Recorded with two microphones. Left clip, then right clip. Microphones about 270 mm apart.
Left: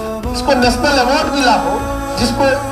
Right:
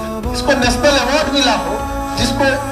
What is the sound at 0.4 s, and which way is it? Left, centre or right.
Speech, right.